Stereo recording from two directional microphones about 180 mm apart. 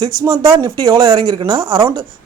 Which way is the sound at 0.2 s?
30° right (ahead or behind).